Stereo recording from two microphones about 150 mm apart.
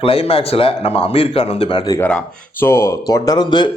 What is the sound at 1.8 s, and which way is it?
Speech, 20° left (ahead or behind).